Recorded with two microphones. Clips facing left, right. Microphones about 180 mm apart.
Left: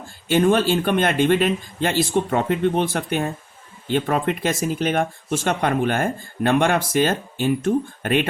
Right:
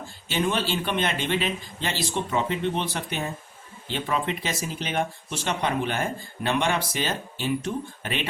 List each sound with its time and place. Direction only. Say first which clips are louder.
0.3 s speech: left 9 dB; 50° left (ahead or behind)